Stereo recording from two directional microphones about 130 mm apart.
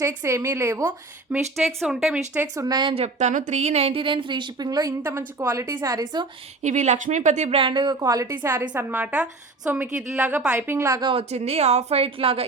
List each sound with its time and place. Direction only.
0.0 s a woman's voice: 20° right (ahead or behind)
1.5 s speech: centre (ahead or behind)
2.6 s a woman's voice: 35° right (ahead or behind)
2.9 s a woman's voice: 60° right (ahead or behind); by 4.9 s 30° right (ahead or behind)
5.0 s a woman's voice: 20° right (ahead or behind)
6.6 s speech: 65° right (ahead or behind)
7.6 s a woman's voice: 35° right (ahead or behind)
11.1 s a woman's voice: 50° right (ahead or behind)